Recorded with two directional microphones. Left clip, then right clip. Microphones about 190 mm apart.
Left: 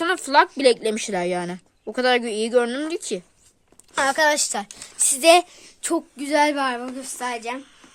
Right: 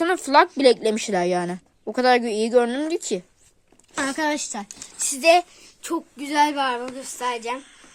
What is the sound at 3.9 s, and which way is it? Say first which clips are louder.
Speech: left 5 dB; 60° left (ahead or behind).